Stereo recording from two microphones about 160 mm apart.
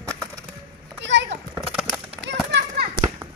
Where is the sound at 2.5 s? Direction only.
90° right.